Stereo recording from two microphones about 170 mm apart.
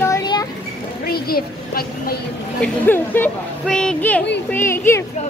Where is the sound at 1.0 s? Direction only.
65° left (ahead or behind).